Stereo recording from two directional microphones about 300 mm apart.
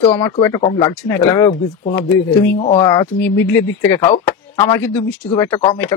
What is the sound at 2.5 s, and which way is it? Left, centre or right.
Speech, centre.